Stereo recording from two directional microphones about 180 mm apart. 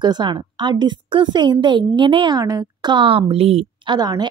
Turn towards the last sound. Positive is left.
turn(degrees=-20)  # may be behind; listen again after turning